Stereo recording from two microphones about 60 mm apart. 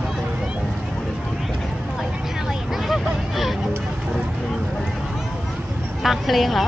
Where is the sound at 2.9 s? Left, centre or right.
Centre.